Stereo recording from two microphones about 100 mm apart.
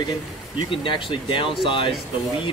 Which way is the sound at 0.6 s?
55° left (ahead or behind).